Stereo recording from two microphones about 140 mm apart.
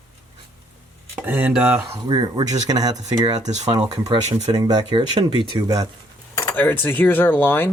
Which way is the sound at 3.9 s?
30° right (ahead or behind).